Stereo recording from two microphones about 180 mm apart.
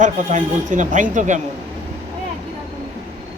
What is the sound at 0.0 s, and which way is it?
Speech, 45° right (ahead or behind).